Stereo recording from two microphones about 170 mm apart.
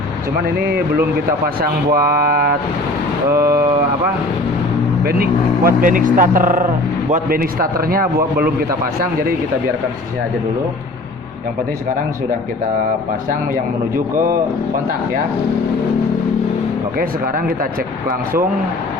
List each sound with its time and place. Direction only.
0.4 s a man's voice: 65° right (ahead or behind)
3.2 s speech: 15° right (ahead or behind)
5.0 s a man's voice: 65° right (ahead or behind)
17.0 s a man's voice: 55° right (ahead or behind)